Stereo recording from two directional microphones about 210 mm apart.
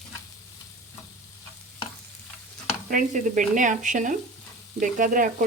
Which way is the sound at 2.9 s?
40° right (ahead or behind).